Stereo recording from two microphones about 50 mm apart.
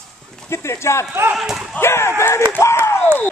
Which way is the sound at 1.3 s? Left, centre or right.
Centre.